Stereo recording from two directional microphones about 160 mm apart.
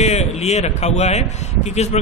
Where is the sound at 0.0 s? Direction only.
45° left (ahead or behind).